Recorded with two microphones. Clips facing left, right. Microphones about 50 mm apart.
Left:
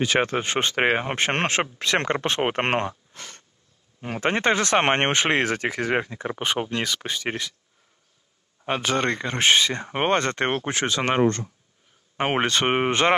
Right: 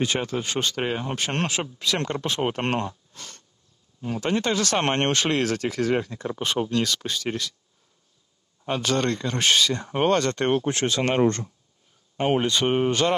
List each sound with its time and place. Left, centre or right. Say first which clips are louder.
0.2 s speech: left 3 dB; left
6.7 s speech: right 2 dB; centre
8.6 s speech: left 1 dB; left
10.7 s speech: even; centre
11.0 s speech: left 1 dB; left
12.2 s speech: even; left